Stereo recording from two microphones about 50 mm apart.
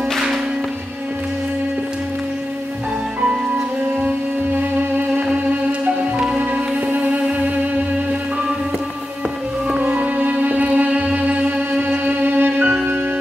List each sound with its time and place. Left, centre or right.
5.3 s music: centre
9.8 s music: right
12.4 s music: right